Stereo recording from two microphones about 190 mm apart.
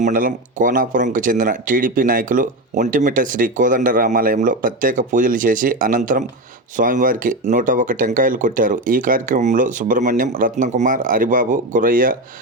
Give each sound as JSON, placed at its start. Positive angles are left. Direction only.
{"t": 0.0, "sound": "speech", "side_deg": -45}